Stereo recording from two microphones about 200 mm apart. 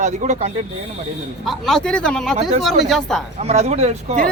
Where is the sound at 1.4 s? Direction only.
Centre (ahead or behind).